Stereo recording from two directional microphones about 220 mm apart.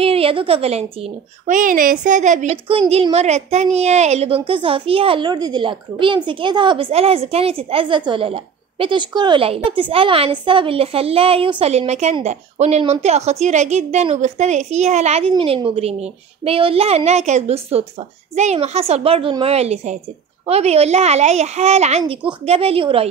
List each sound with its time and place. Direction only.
0.0 s a woman's voice: 25° right (ahead or behind)